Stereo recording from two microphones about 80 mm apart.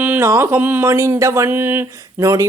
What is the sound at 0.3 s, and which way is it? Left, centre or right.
Speech, right.